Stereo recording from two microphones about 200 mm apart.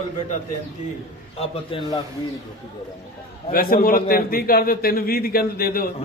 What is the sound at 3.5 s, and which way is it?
A man's voice, 45° left (ahead or behind).